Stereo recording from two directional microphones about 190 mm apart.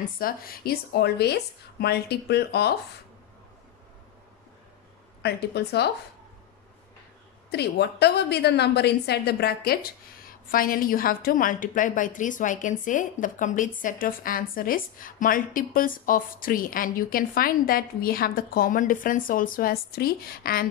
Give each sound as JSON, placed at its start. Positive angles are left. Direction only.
{"t": 0.2, "sound": "a woman's voice", "side_deg": 50}
{"t": 5.2, "sound": "a woman's voice", "side_deg": 60}
{"t": 7.5, "sound": "a woman's voice", "side_deg": 60}